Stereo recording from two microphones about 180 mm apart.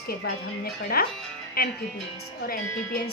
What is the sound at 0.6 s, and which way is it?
A woman's voice, 55° left (ahead or behind).